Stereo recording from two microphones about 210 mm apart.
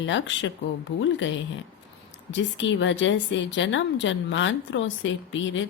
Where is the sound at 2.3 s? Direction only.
60° left (ahead or behind).